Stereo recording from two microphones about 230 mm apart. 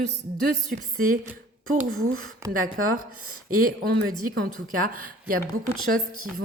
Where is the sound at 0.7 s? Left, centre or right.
Right.